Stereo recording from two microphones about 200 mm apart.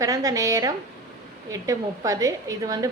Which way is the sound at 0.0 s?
15° right (ahead or behind).